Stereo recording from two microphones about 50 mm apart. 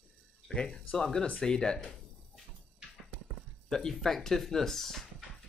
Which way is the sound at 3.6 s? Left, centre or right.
Centre.